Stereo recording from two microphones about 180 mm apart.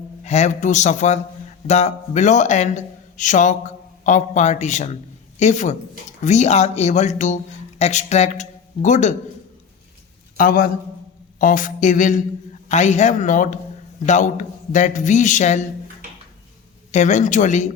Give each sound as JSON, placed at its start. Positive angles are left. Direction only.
{"t": 0.3, "sound": "a man's voice", "side_deg": 40}
{"t": 10.3, "sound": "a man's voice", "side_deg": 50}
{"t": 16.9, "sound": "a man's voice", "side_deg": 40}